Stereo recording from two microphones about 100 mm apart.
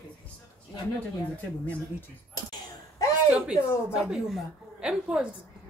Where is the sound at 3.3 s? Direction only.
10° right (ahead or behind).